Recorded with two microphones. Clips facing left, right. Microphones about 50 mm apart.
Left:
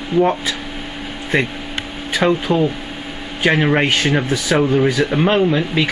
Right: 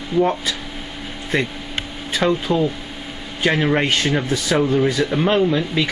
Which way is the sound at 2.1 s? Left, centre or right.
Left.